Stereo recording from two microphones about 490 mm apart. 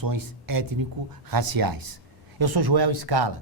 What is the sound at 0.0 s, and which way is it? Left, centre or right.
Speech, right.